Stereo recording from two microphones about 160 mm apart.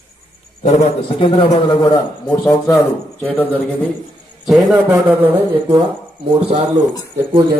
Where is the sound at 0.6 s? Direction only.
45° left (ahead or behind).